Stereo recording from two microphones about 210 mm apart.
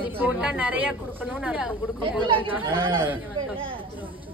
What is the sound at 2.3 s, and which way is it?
Speech, 25° right (ahead or behind).